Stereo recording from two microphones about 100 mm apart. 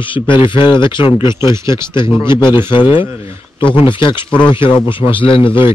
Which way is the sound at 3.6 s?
55° left (ahead or behind).